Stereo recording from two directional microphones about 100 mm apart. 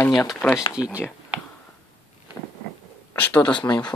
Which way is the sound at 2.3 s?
25° left (ahead or behind).